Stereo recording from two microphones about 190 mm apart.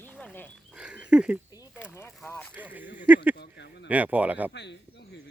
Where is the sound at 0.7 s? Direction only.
5° right (ahead or behind).